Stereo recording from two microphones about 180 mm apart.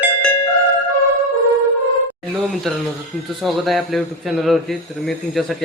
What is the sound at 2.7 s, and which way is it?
Speech, centre (ahead or behind).